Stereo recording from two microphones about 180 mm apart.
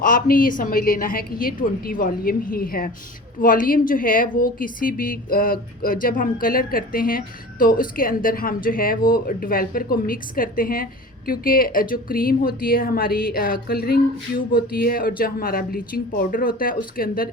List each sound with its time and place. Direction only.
0.0 s speech: 50° left (ahead or behind)